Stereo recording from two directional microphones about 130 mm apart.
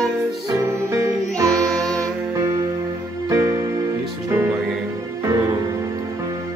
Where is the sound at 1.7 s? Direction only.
5° left (ahead or behind).